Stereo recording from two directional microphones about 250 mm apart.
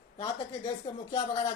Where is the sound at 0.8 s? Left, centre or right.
Left.